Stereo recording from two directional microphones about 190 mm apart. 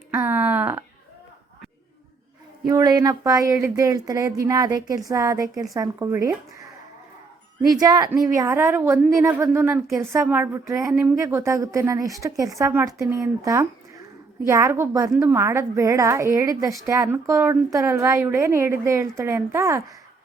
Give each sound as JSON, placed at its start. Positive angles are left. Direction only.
{"t": 0.1, "sound": "a woman's voice", "side_deg": -10}
{"t": 2.6, "sound": "a woman's voice", "side_deg": -20}
{"t": 7.7, "sound": "a woman's voice", "side_deg": -20}